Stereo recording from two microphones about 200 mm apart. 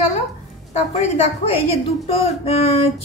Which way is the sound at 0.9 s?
35° left (ahead or behind).